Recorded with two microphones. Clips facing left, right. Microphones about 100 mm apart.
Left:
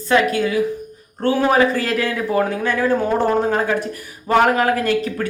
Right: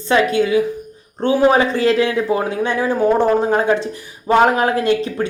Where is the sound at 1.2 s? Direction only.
20° right (ahead or behind).